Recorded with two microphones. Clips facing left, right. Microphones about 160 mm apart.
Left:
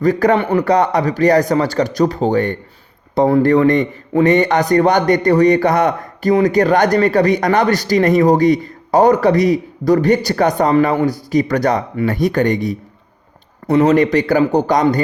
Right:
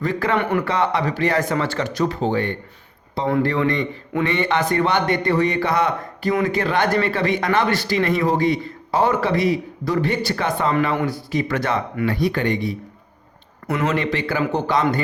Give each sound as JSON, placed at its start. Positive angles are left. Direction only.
{"t": 0.0, "sound": "a man's voice", "side_deg": 40}